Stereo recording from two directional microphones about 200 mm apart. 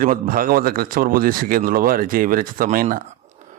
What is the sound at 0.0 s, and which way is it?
Speech, 45° right (ahead or behind).